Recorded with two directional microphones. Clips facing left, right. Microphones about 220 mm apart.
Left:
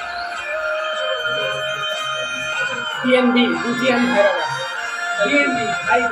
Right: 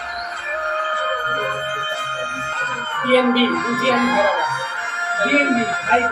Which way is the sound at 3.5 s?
35° left (ahead or behind).